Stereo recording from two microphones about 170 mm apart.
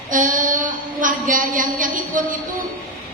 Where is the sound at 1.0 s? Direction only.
50° right (ahead or behind).